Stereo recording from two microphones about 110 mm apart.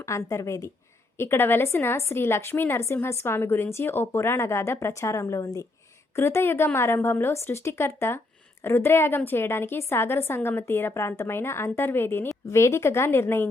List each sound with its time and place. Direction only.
0.0 s a woman's voice: 25° left (ahead or behind)